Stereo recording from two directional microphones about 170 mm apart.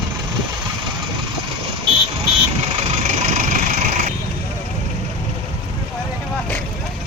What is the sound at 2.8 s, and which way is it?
Vehicle, 45° right (ahead or behind).